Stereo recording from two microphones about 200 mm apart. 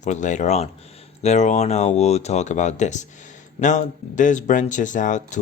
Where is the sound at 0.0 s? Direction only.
35° left (ahead or behind).